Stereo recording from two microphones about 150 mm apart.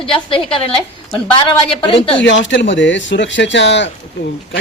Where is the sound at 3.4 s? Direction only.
90° left.